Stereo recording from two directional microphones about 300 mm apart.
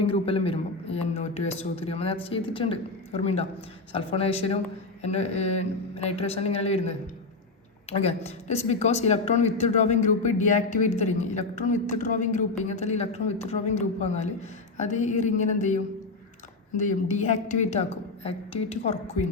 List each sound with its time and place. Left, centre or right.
0.0 s a woman's voice: centre